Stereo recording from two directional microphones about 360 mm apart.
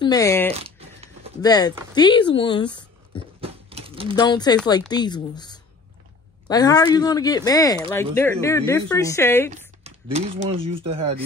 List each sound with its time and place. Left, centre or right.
0.0 s speech: centre
0.6 s a sound: centre
1.4 s speech: centre
3.3 s a sound: centre
4.1 s speech: centre
9.8 s speech: centre